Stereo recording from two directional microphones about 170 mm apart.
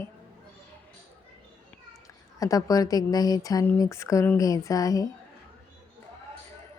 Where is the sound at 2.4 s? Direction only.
20° left (ahead or behind).